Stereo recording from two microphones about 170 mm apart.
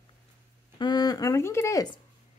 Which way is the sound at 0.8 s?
25° left (ahead or behind).